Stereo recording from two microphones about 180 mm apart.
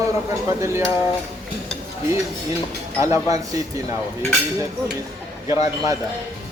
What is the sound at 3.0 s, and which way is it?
Speech, 20° right (ahead or behind).